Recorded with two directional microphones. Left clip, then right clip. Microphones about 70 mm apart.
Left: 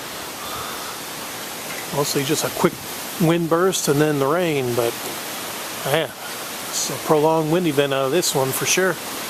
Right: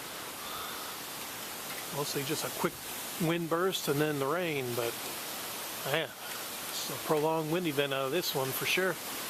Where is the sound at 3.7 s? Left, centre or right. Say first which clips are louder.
Left 12 dB; centre.